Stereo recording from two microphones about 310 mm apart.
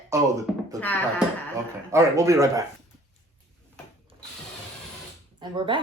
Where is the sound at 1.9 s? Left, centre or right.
Centre.